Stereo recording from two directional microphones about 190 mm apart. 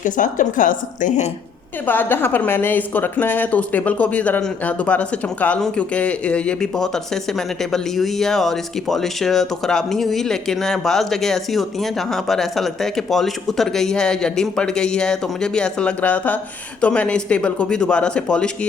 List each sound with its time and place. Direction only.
0.0 s a woman's voice: 40° left (ahead or behind)
1.9 s a woman's voice: 10° left (ahead or behind)